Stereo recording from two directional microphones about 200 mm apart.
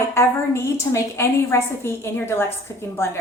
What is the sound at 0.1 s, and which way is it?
A woman's voice, 15° left (ahead or behind).